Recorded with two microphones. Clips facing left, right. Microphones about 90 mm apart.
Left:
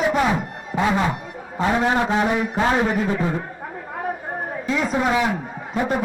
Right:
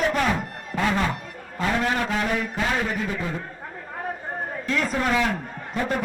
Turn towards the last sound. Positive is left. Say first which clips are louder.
# left 3 dB
turn(degrees=15)  # may be behind; listen again after turning